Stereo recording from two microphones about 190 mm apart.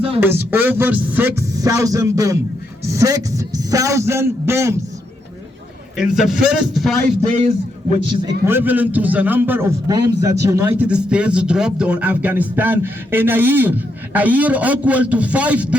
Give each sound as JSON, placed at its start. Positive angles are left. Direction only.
{"t": 0.2, "sound": "speech", "side_deg": -10}
{"t": 6.0, "sound": "speech", "side_deg": 0}
{"t": 7.4, "sound": "a man's voice", "side_deg": -35}
{"t": 8.4, "sound": "speech", "side_deg": -10}